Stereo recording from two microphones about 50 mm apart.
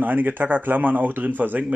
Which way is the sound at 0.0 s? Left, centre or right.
Right.